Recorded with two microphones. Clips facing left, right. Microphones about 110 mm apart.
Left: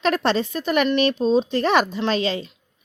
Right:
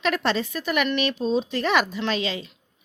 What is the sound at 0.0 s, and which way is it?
A woman's voice, 35° left (ahead or behind).